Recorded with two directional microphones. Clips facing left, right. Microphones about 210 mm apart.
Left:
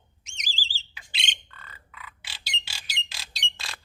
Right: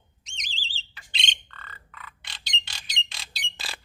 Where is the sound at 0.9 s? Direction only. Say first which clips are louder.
Right 2 dB; 10° left (ahead or behind).